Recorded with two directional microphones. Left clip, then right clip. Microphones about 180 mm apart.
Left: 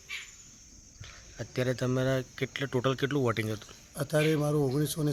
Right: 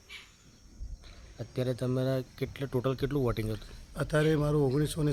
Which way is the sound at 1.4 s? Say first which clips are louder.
Left 2 dB; centre (ahead or behind).